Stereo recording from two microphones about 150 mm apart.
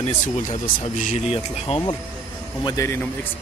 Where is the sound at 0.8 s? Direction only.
45° left (ahead or behind).